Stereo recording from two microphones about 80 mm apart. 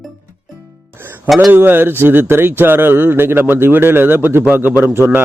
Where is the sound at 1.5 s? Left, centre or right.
Right.